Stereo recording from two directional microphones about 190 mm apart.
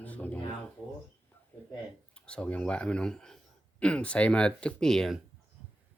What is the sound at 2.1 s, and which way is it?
Speech, 5° left (ahead or behind).